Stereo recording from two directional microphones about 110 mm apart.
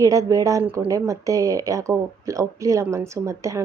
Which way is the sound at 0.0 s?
30° right (ahead or behind).